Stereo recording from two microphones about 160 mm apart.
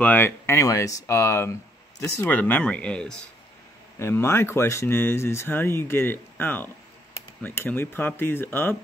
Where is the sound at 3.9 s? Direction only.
15° left (ahead or behind).